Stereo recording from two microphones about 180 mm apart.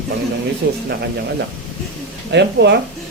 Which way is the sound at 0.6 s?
60° right (ahead or behind).